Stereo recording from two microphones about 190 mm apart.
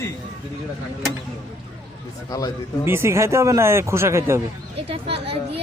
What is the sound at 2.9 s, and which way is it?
Speech, 15° right (ahead or behind).